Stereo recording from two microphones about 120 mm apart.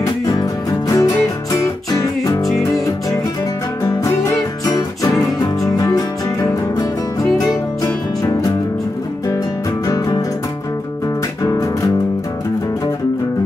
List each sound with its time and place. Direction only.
0.8 s music: 30° left (ahead or behind)
4.6 s music: 30° left (ahead or behind)